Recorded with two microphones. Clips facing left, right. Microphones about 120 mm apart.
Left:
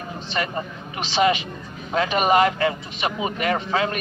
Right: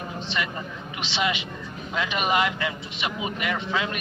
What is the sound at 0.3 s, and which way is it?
A man's voice, 40° left (ahead or behind).